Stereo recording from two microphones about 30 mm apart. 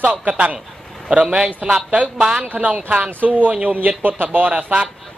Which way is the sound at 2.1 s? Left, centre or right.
Right.